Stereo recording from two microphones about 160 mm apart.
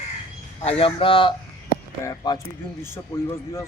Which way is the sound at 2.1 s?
25° left (ahead or behind).